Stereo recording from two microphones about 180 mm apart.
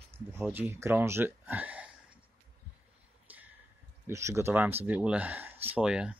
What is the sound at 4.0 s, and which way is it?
Speech, 15° right (ahead or behind).